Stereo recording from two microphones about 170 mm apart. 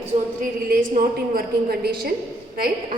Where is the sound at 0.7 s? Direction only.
55° right (ahead or behind).